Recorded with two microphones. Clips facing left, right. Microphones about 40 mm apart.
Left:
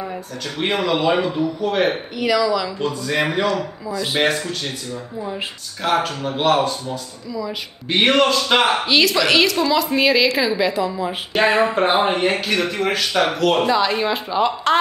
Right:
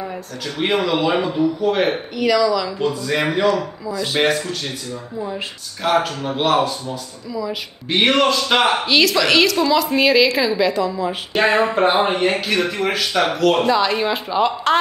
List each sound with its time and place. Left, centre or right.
0.0 s speech: centre
2.8 s speech: centre